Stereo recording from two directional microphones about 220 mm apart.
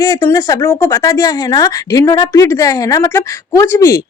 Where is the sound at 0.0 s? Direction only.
15° left (ahead or behind).